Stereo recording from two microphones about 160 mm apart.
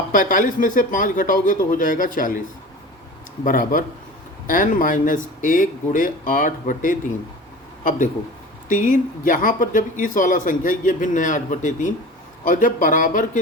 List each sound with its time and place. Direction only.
0.1 s speech: 55° left (ahead or behind)
3.4 s a man's voice: 55° left (ahead or behind)